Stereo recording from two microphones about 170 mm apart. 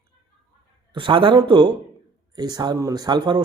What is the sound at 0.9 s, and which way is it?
A man's voice, 30° right (ahead or behind).